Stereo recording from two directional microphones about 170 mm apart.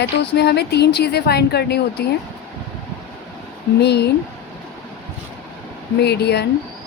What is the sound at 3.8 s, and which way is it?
Speech, 80° left.